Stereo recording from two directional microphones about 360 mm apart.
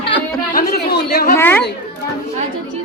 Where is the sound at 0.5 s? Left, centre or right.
Left.